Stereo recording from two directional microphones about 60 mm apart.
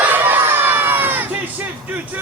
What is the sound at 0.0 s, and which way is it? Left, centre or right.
Crowd, right.